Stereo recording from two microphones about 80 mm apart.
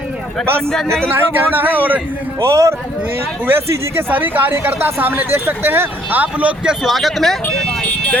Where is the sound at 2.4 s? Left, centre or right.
Right.